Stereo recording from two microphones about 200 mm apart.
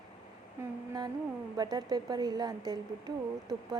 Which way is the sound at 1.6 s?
20° right (ahead or behind).